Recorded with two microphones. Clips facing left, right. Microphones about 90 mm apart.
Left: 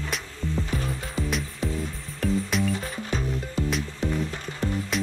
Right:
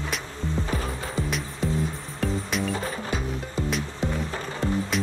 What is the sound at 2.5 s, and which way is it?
Music, centre (ahead or behind).